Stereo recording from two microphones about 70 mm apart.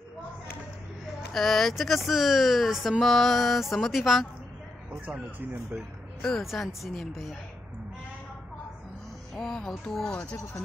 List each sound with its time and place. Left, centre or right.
1.3 s speech: centre
5.0 s speech: right
5.8 s speech: centre
9.3 s speech: centre